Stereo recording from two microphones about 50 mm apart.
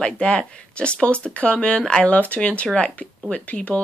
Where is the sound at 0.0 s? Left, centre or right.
Left.